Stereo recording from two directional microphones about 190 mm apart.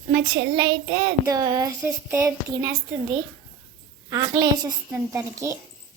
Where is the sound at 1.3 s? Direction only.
20° right (ahead or behind).